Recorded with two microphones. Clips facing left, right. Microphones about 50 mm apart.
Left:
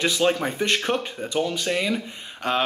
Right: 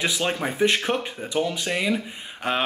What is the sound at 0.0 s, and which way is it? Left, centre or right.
Speech, centre.